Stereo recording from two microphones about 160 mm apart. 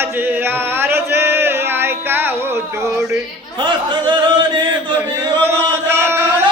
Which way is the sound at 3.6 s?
30° right (ahead or behind).